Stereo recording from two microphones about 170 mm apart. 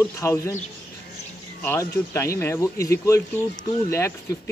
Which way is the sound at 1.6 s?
15° left (ahead or behind).